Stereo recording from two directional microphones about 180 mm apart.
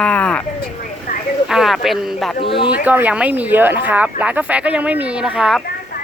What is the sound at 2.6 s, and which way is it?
Speech, 10° right (ahead or behind).